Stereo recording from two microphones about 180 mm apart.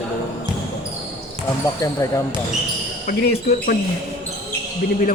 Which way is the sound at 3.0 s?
60° left (ahead or behind).